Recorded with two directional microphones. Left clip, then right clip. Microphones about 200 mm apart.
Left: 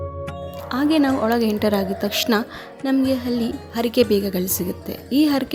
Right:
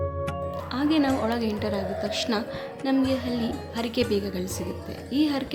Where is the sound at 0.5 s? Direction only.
35° left (ahead or behind).